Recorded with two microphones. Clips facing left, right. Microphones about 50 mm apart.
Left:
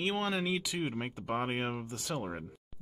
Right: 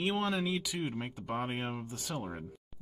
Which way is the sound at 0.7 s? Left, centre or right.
Centre.